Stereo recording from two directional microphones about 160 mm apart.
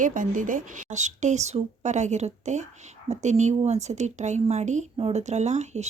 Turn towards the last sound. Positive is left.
turn(degrees=-45)  # may be behind; listen again after turning